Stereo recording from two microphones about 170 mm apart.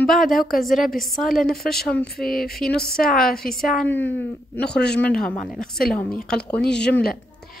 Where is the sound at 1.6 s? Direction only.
Centre (ahead or behind).